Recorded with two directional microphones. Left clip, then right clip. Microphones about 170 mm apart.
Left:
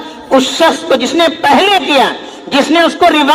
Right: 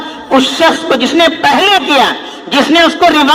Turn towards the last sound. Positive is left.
turn(degrees=-25)  # may be behind; listen again after turning